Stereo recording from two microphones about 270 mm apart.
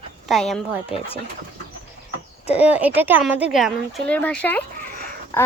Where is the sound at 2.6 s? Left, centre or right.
Centre.